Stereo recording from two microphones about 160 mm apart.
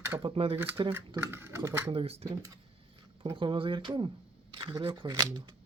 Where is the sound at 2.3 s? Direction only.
25° right (ahead or behind).